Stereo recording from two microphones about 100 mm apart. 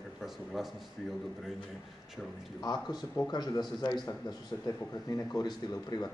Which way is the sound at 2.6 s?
45° left (ahead or behind).